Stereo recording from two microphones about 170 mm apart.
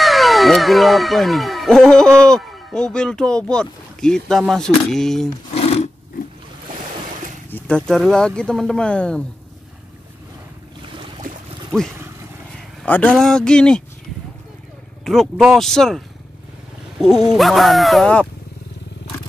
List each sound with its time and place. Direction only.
0.0 s speech: centre (ahead or behind)
5.5 s roar: 40° left (ahead or behind)
7.5 s speech: 5° left (ahead or behind)
11.7 s speech: 5° left (ahead or behind)
15.0 s speech: centre (ahead or behind)
17.3 s speech: centre (ahead or behind)